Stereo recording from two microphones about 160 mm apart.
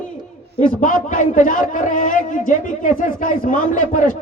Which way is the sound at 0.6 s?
55° left (ahead or behind).